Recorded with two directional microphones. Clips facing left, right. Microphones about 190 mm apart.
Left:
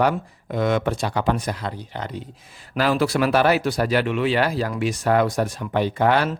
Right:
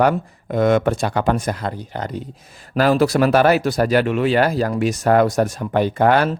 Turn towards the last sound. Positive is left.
turn(degrees=-45)  # may be behind; listen again after turning